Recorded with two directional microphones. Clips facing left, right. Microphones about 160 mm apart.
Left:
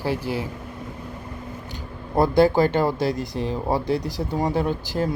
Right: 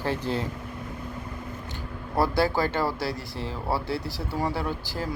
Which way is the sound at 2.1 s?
20° left (ahead or behind).